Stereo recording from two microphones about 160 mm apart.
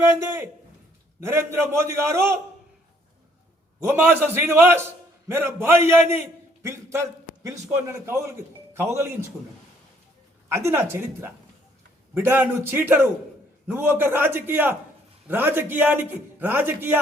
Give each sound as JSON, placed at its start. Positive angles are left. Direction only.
{"t": 0.0, "sound": "a man's voice", "side_deg": -15}
{"t": 3.8, "sound": "a man's voice", "side_deg": -15}
{"t": 10.5, "sound": "a man's voice", "side_deg": -15}